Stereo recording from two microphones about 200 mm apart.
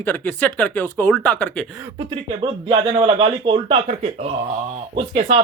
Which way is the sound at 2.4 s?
25° right (ahead or behind).